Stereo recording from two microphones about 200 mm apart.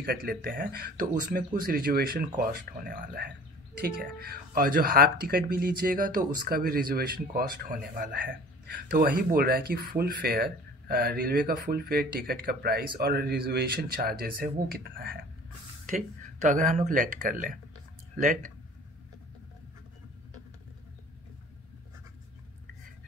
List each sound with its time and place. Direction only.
0.0 s speech: 50° right (ahead or behind)